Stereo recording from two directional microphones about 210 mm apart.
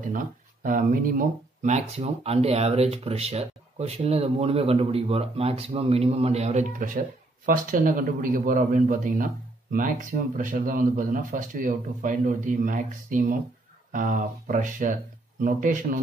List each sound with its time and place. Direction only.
0.0 s a man's voice: 40° right (ahead or behind)